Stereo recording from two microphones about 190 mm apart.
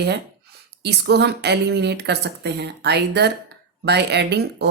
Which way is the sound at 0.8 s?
60° right (ahead or behind).